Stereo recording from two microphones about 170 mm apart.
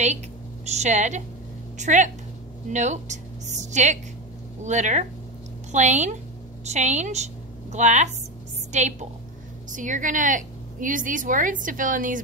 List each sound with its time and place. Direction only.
0.7 s a woman's voice: 45° right (ahead or behind)